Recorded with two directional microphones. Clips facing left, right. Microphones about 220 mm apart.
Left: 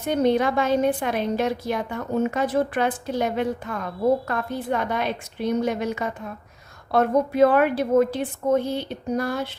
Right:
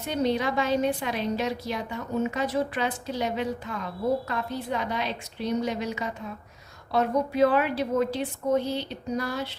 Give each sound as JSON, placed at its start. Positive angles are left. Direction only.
{"t": 0.0, "sound": "a woman's voice", "side_deg": 50}